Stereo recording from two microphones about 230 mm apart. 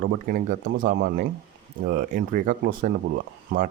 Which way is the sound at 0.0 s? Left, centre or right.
Right.